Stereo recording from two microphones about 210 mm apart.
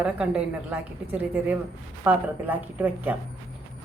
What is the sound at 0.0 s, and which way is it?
Speech, 5° right (ahead or behind).